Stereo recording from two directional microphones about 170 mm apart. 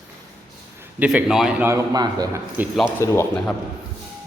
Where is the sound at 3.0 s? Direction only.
15° left (ahead or behind).